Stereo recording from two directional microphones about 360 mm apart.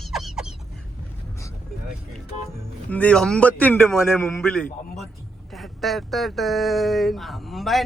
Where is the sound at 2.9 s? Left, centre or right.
Centre.